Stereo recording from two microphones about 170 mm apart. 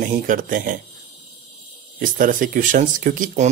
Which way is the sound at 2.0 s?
55° right (ahead or behind).